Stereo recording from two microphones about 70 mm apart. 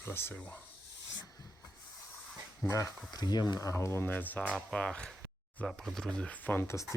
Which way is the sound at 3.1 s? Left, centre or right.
Left.